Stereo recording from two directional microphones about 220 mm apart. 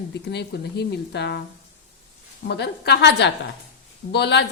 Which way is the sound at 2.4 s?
50° left (ahead or behind).